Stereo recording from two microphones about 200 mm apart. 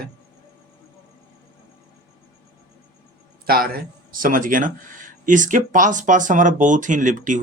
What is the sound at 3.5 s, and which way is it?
Speech, 50° right (ahead or behind).